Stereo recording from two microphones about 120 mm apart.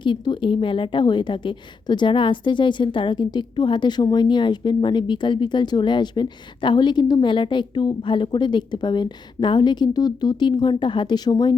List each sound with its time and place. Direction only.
0.0 s a woman's voice: 40° left (ahead or behind)